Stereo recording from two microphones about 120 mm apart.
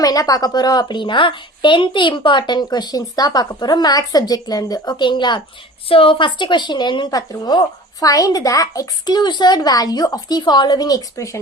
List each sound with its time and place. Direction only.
0.0 s a woman's voice: 30° left (ahead or behind)